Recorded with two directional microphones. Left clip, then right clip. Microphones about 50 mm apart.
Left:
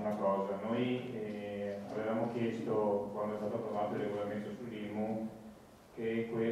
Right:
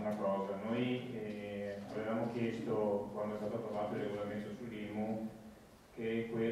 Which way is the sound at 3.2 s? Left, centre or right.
Centre.